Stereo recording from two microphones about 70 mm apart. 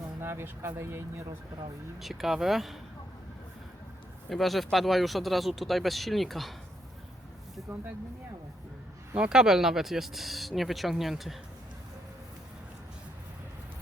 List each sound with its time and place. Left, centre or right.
0.2 s speech: right
2.0 s speech: centre
4.3 s speech: centre
9.1 s speech: centre